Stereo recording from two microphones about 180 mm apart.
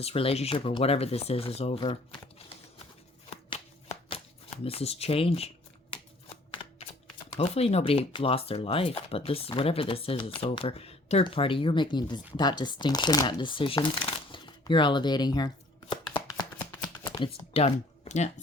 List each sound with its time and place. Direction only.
0.0 s speech: 35° left (ahead or behind)
4.6 s speech: 35° left (ahead or behind)
5.9 s shuffling cards: 30° left (ahead or behind)
6.5 s typewriter: 30° left (ahead or behind)
7.3 s speech: 35° left (ahead or behind)
15.9 s chopping: 25° left (ahead or behind)
16.8 s computer keyboard: 20° left (ahead or behind)